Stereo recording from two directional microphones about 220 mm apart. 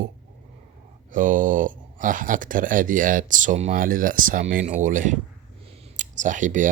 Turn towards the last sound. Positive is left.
turn(degrees=-35)  # may be behind; listen again after turning